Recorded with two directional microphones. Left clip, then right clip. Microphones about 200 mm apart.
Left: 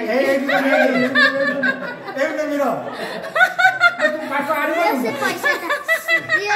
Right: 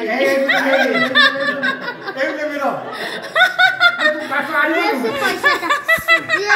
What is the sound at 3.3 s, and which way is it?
Snicker, 5° left (ahead or behind).